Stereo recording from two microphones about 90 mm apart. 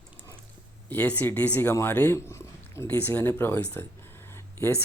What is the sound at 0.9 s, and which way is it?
Speech, 20° left (ahead or behind).